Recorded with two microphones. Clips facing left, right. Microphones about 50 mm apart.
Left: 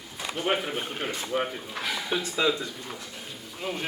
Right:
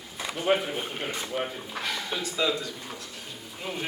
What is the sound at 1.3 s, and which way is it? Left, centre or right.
Speech, left.